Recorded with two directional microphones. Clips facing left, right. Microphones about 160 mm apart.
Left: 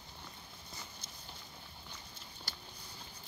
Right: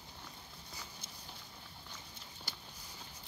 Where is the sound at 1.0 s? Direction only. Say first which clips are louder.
Even; 55° right (ahead or behind).